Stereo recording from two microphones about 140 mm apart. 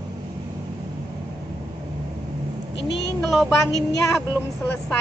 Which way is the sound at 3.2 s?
Centre (ahead or behind).